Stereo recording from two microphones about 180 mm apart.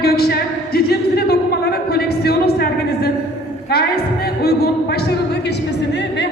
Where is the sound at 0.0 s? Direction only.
60° left (ahead or behind).